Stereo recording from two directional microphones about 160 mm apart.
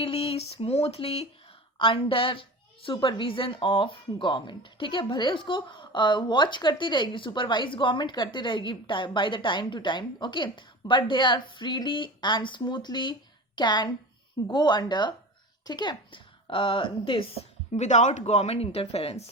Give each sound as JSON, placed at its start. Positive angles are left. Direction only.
{"t": 0.0, "sound": "a woman's voice", "side_deg": 35}